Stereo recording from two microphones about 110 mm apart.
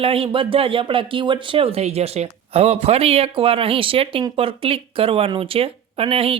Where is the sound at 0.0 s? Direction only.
55° right (ahead or behind).